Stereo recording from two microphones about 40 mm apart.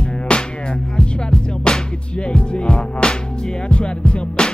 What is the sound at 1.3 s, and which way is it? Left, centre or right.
Music, centre.